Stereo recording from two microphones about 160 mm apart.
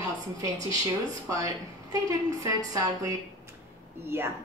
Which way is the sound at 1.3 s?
20° right (ahead or behind).